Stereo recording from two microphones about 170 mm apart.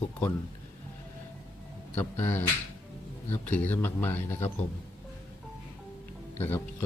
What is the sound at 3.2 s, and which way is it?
Speech, 10° left (ahead or behind).